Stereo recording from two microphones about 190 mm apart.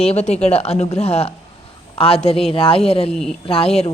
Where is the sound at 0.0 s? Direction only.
35° left (ahead or behind).